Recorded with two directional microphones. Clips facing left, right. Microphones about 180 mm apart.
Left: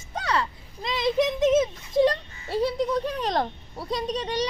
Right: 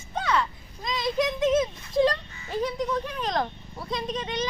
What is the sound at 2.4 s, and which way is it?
A child's voice, 35° left (ahead or behind).